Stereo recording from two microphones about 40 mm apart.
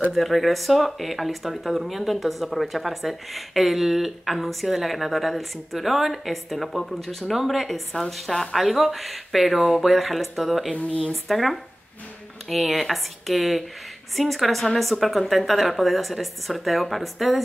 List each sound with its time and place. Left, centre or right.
0.1 s speech: centre
7.9 s a woman's voice: centre
8.7 s speech: centre
10.7 s speech: left
11.1 s speech: centre